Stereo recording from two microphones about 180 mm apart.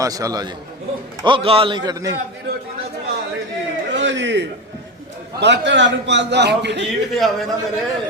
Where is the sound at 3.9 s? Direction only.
90° right.